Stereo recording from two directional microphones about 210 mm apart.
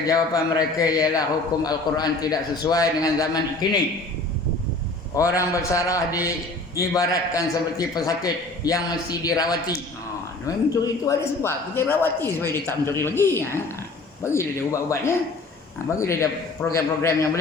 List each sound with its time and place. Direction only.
0.0 s a man's voice: 15° left (ahead or behind)
5.1 s a man's voice: 15° left (ahead or behind)